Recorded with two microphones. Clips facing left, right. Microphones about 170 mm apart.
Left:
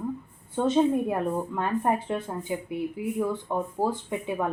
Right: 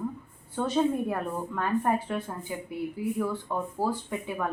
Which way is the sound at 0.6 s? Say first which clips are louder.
Left 4 dB; 20° left (ahead or behind).